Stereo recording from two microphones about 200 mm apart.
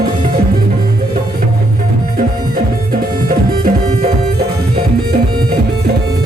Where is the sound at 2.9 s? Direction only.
45° right (ahead or behind).